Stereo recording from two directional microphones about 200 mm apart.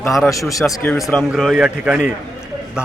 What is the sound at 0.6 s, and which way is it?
A man's voice, 5° left (ahead or behind).